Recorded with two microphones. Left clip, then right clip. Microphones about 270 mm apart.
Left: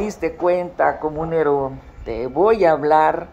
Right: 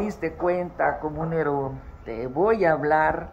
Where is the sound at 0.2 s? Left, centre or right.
Left.